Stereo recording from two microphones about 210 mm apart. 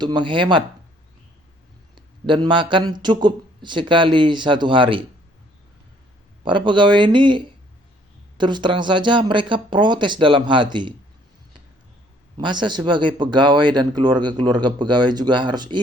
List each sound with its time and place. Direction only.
0.0 s speech: 20° right (ahead or behind)
2.0 s a man's voice: 20° right (ahead or behind)
6.4 s speech: 25° right (ahead or behind)
12.4 s speech: 20° right (ahead or behind)